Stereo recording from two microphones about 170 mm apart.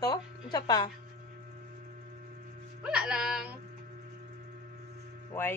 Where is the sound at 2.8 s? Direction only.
5° right (ahead or behind).